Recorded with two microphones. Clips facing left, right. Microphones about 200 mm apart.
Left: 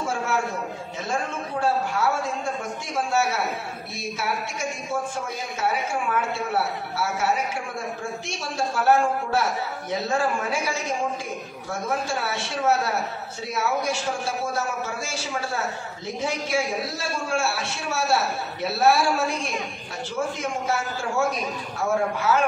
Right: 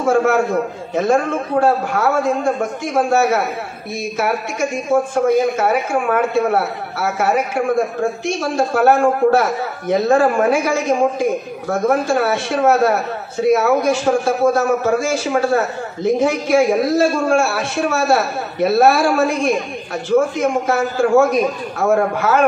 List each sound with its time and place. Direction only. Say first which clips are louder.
0.0 s a man's voice: right 12 dB; 55° right (ahead or behind)